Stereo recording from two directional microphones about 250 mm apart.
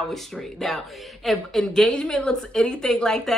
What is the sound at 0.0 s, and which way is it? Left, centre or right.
Speech, centre.